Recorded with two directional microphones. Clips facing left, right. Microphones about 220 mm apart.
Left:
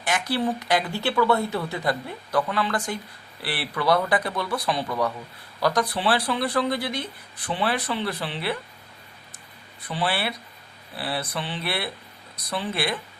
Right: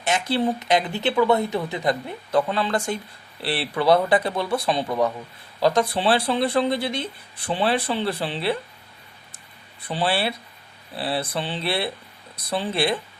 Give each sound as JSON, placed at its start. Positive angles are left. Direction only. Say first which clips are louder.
{"t": 0.0, "sound": "speech", "louder": "right 3 dB", "side_deg": -25}
{"t": 9.8, "sound": "speech", "louder": "right 3 dB", "side_deg": -30}